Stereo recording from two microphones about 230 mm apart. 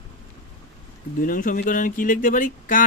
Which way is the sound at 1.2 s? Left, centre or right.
Left.